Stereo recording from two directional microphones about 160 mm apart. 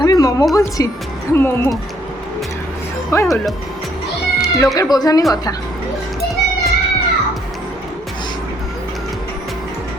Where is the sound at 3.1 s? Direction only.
15° left (ahead or behind).